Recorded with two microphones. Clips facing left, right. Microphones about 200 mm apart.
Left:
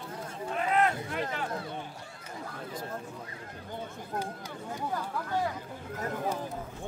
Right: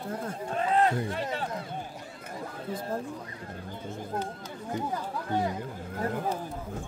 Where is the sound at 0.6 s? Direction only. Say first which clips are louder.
Right 2 dB; 35° right (ahead or behind).